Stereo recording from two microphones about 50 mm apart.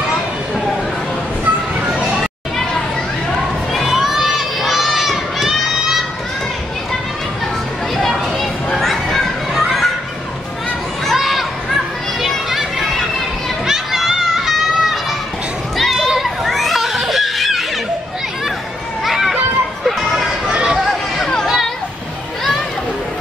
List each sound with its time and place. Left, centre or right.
3.9 s crowd: centre
8.7 s children playing: centre
11.1 s a sound: centre
12.2 s children playing: centre
15.8 s children playing: centre
19.0 s children playing: centre
20.4 s chatter: centre